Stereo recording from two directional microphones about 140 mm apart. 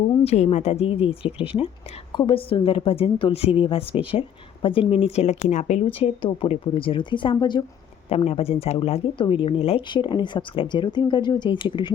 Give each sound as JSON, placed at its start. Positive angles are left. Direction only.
{"t": 0.3, "sound": "speech", "side_deg": 50}
{"t": 8.1, "sound": "speech", "side_deg": 45}